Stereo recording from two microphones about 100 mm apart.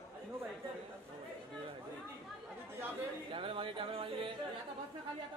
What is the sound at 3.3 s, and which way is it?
Music, 65° right (ahead or behind).